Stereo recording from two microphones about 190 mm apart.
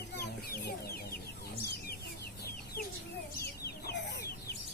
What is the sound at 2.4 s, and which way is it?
Chicken, 55° left (ahead or behind).